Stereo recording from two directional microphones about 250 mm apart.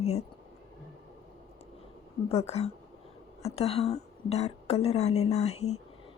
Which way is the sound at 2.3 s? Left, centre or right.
Left.